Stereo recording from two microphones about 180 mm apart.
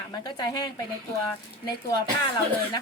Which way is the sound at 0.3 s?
25° left (ahead or behind).